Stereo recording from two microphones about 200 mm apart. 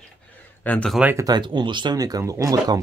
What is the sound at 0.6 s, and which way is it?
Speech, 5° left (ahead or behind).